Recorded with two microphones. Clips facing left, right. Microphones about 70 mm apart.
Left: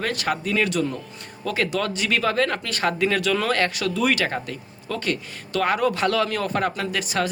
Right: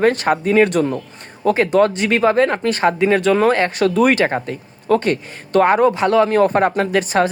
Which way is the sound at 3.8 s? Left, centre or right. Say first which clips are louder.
Right 8 dB; right.